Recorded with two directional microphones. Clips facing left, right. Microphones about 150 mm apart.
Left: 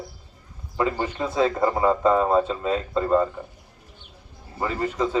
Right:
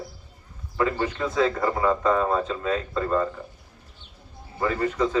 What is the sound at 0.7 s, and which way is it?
Speech, 20° left (ahead or behind).